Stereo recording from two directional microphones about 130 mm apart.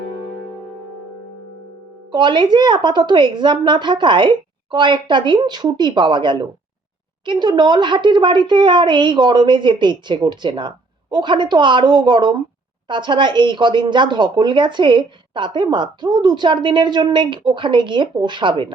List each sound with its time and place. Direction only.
2.1 s a woman's voice: 35° right (ahead or behind)